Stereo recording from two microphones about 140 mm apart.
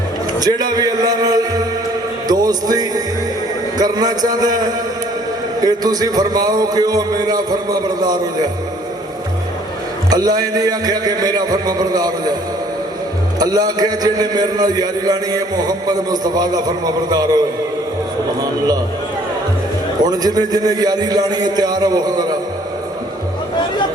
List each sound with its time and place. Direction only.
0.3 s a man's voice: 30° right (ahead or behind)
10.1 s a man's voice: 25° right (ahead or behind)
13.4 s a man's voice: 30° right (ahead or behind)
20.0 s a man's voice: 30° right (ahead or behind)